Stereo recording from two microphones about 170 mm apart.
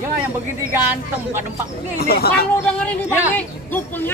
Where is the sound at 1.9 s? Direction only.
65° left (ahead or behind).